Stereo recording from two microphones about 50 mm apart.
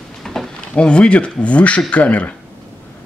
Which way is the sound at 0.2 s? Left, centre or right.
Centre.